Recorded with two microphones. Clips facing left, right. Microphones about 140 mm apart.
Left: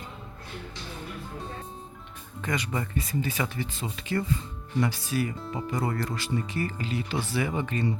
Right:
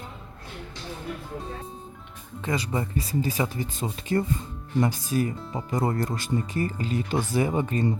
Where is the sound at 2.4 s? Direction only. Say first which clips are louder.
Right 3 dB; 30° right (ahead or behind).